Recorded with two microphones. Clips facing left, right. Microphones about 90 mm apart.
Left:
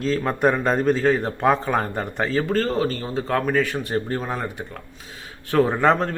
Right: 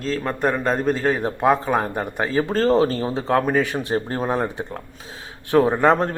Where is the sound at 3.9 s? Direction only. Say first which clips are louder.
Right 3 dB; 30° right (ahead or behind).